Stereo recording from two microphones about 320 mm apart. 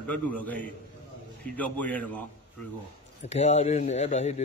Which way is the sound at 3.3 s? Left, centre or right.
Left.